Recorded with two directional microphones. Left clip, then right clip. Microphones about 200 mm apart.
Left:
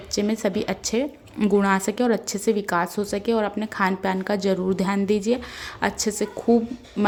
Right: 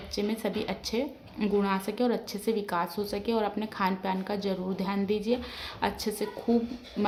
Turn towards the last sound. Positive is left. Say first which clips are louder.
# left 8 dB
turn(degrees=25)  # may be behind; listen again after turning